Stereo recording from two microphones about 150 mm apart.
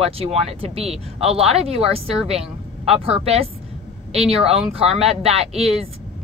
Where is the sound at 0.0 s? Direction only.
40° right (ahead or behind).